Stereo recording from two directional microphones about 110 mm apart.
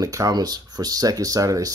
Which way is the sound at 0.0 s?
30° right (ahead or behind).